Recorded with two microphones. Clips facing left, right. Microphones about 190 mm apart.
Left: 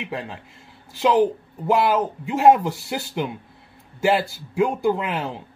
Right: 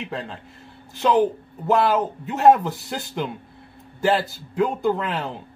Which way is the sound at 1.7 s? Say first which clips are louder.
Even; 10° left (ahead or behind).